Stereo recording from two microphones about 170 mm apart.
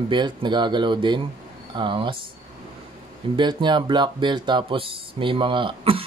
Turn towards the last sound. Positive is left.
turn(degrees=-30)  # may be behind; listen again after turning